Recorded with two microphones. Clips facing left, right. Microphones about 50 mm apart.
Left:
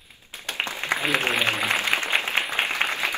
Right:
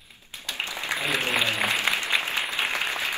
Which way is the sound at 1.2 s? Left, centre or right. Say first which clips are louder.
Left 1 dB; left.